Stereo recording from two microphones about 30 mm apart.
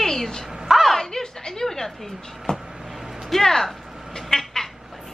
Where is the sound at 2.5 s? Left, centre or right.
Left.